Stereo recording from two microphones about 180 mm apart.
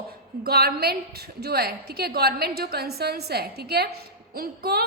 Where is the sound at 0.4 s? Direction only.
60° right (ahead or behind).